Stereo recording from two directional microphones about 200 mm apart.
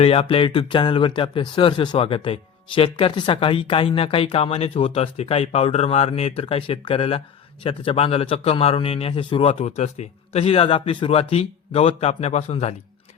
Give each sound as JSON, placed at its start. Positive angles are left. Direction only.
{"t": 0.0, "sound": "speech", "side_deg": 30}